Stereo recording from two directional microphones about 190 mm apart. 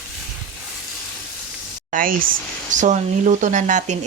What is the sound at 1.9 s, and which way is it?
Speech, 45° right (ahead or behind).